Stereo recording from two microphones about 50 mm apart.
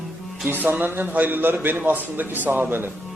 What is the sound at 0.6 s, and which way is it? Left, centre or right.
A man's voice, right.